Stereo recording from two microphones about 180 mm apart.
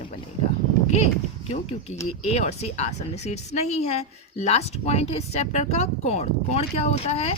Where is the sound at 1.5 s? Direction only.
35° left (ahead or behind).